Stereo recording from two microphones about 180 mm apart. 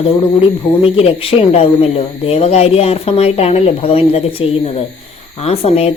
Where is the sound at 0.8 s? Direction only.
30° left (ahead or behind).